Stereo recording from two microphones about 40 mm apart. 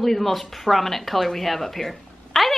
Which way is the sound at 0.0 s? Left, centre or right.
Centre.